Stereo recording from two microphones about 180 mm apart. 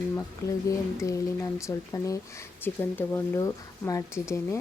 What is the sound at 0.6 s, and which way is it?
Speech, 15° left (ahead or behind).